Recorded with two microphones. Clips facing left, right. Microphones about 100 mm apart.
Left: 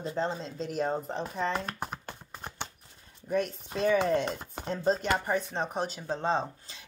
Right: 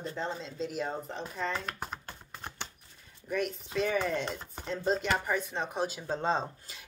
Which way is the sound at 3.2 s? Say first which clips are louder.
Left 3 dB; 35° left (ahead or behind).